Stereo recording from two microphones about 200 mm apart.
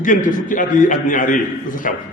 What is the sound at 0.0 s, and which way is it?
A man's voice, 40° left (ahead or behind).